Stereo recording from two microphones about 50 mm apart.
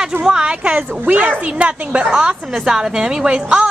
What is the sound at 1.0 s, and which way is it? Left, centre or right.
A woman's voice, right.